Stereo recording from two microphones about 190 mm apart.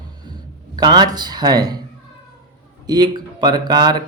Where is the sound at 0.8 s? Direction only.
20° right (ahead or behind).